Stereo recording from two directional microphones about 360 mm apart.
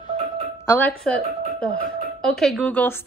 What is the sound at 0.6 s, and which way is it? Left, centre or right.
Speech, centre.